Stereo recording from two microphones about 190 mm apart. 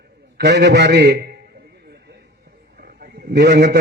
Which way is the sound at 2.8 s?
50° right (ahead or behind).